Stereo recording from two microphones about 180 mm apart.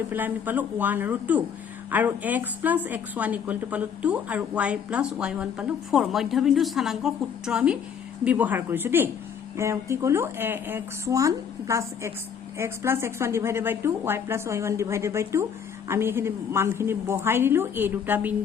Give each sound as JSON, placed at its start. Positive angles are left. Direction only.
{"t": 0.1, "sound": "a woman's voice", "side_deg": -10}